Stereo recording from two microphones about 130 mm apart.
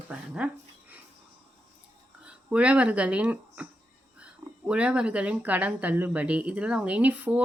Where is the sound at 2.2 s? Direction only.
10° right (ahead or behind).